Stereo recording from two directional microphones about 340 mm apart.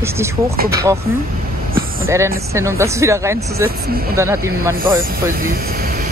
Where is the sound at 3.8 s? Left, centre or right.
Right.